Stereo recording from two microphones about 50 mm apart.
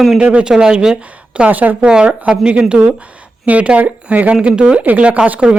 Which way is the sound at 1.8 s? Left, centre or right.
Right.